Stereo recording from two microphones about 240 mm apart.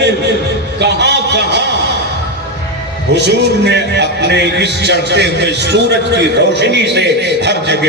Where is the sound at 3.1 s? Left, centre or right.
Right.